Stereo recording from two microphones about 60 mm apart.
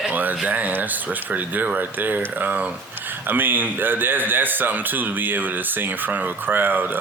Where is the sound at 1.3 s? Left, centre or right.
Right.